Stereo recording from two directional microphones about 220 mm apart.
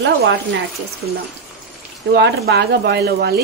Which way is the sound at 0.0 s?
50° right (ahead or behind).